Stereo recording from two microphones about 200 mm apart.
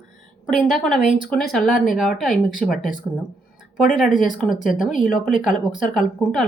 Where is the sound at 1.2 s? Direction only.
Centre (ahead or behind).